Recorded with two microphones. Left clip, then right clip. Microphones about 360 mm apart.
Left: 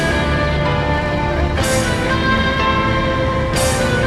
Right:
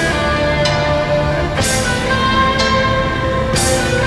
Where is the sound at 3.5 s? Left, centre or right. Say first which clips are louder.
Right 1 dB; centre.